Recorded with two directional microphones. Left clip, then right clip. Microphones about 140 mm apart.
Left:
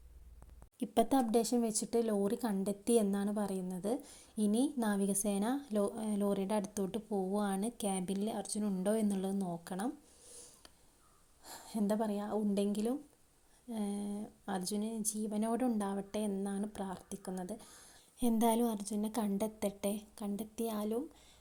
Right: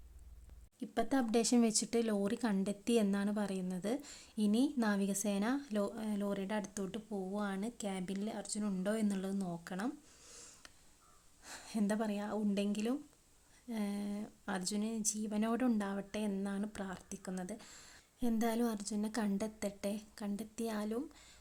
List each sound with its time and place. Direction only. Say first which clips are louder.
0.8 s speech: left 6 dB; 25° left (ahead or behind)
1.3 s a woman's voice: even; 5° right (ahead or behind)
10.2 s writing: even; 10° right (ahead or behind)
11.4 s a woman's voice: left 2 dB; centre (ahead or behind)
18.2 s a woman's voice: left 4 dB; 20° left (ahead or behind); by 21.3 s centre (ahead or behind)